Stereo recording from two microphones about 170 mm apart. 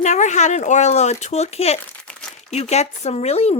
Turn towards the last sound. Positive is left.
turn(degrees=40)  # may be behind; listen again after turning